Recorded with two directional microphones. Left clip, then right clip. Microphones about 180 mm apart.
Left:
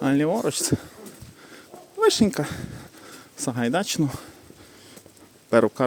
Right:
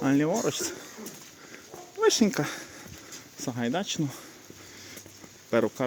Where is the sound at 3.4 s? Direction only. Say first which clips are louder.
Left 6 dB; 35° left (ahead or behind).